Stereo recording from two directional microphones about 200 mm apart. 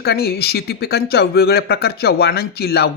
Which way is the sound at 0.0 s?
50° left (ahead or behind).